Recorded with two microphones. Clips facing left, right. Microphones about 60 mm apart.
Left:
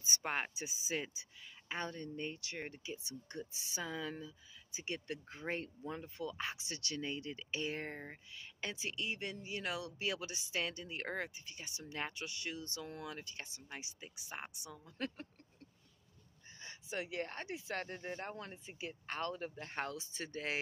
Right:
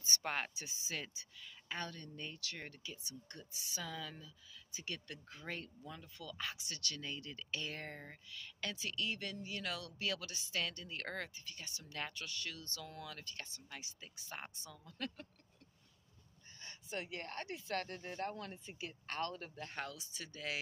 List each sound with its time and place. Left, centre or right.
0.0 s speech: centre
16.6 s speech: centre